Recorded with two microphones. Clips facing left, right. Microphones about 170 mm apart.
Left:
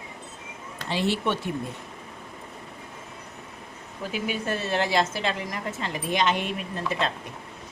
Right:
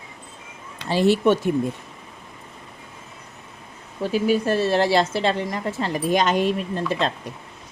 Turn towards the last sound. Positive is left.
turn(degrees=-35)  # may be behind; listen again after turning